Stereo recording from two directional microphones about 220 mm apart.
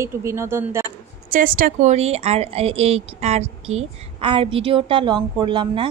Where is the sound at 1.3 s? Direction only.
40° right (ahead or behind).